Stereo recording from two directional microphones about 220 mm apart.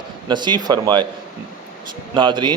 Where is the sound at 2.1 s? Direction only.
20° right (ahead or behind).